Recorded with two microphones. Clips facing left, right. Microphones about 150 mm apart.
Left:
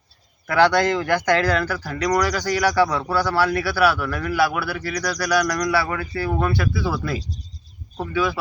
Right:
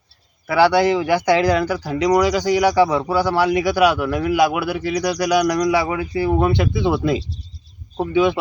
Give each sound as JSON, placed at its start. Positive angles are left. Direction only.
{"t": 0.4, "sound": "speech", "side_deg": -10}